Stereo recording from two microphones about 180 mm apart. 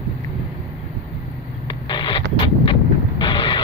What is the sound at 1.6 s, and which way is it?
Vehicle, 25° left (ahead or behind).